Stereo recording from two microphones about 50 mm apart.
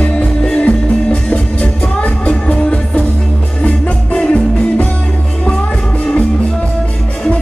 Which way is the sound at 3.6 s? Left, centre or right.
Left.